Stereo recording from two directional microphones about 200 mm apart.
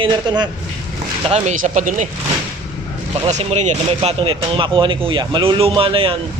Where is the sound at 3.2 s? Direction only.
35° right (ahead or behind).